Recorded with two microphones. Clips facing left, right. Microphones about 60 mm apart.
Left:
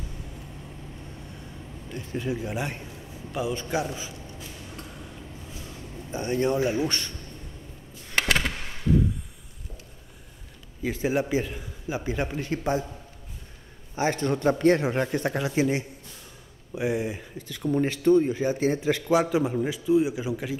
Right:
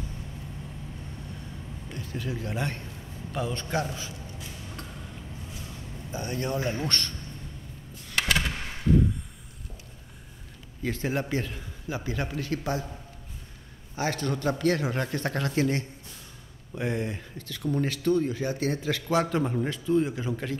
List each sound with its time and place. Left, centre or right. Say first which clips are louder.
2.0 s a man's voice: left 5 dB; left
6.1 s speech: left 6 dB; left; by 7.2 s centre
8.2 s a sound: left 2 dB; left
10.8 s speech: left 4 dB; centre
13.9 s speech: left 4 dB; left; by 20.5 s centre